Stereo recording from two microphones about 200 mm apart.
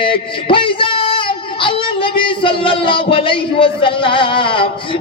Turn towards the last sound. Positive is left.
turn(degrees=25)  # may be behind; listen again after turning